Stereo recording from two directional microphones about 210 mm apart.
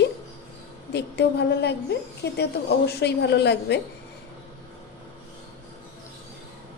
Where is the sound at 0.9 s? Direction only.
55° left (ahead or behind).